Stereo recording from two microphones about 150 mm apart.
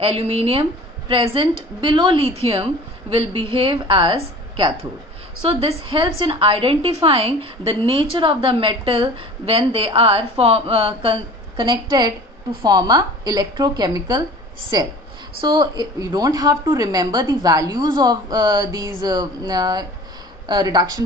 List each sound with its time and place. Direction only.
0.0 s a woman's voice: 40° right (ahead or behind)